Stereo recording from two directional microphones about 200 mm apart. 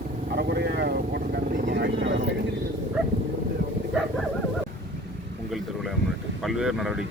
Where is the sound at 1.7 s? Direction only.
60° right (ahead or behind).